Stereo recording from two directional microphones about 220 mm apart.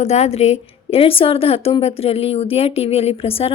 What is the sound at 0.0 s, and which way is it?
A woman's voice, 30° left (ahead or behind).